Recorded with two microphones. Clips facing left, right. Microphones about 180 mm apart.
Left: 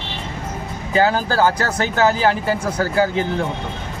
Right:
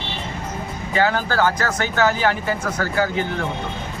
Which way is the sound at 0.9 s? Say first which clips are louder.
Left 3 dB; 35° left (ahead or behind).